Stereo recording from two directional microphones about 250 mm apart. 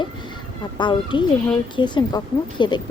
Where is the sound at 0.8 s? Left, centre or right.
Centre.